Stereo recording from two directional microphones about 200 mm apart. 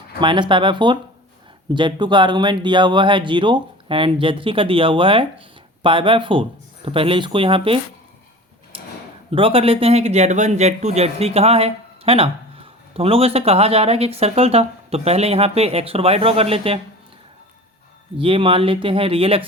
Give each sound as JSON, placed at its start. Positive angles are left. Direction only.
{"t": 0.2, "sound": "speech", "side_deg": -25}
{"t": 9.3, "sound": "speech", "side_deg": -25}
{"t": 18.2, "sound": "speech", "side_deg": -25}